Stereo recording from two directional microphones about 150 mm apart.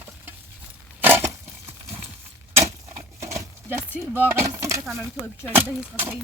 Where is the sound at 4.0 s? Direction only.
15° right (ahead or behind).